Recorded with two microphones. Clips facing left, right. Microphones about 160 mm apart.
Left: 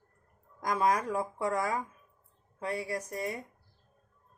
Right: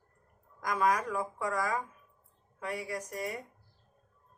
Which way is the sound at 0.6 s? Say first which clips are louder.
Left 1 dB; 30° left (ahead or behind).